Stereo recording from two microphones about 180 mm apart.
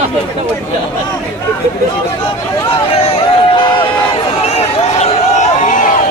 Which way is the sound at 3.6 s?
25° left (ahead or behind).